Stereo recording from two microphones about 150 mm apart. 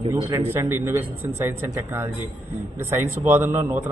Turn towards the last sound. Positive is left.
turn(degrees=-15)  # may be behind; listen again after turning